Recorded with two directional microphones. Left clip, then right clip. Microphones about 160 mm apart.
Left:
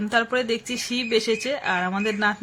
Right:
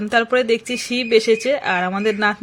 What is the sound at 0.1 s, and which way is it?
Speech, 20° right (ahead or behind).